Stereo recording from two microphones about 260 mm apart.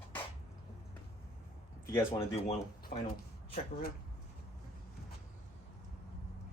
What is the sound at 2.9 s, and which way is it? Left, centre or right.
Speech, left.